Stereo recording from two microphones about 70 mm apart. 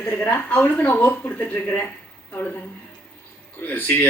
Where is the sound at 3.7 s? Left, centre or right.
Left.